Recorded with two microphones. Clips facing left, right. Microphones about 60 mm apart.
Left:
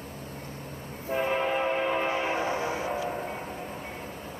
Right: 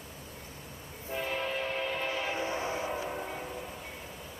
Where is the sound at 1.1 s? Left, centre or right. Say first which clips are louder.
Left 7 dB; left.